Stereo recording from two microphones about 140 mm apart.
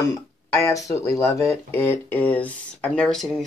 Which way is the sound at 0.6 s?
25° left (ahead or behind).